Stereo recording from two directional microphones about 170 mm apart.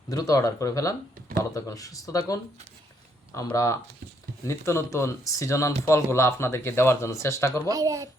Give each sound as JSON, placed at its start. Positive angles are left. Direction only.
{"t": 0.1, "sound": "speech", "side_deg": 20}
{"t": 3.5, "sound": "speech", "side_deg": 20}
{"t": 7.7, "sound": "speech", "side_deg": -20}